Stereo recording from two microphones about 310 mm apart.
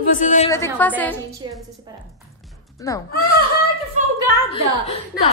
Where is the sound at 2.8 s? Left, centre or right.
Centre.